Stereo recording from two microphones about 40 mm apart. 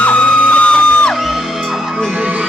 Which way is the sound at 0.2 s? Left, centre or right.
Left.